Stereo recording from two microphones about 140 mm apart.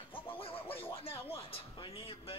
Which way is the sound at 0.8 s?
40° left (ahead or behind).